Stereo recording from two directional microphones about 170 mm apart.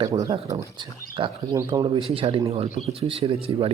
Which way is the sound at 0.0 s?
20° right (ahead or behind).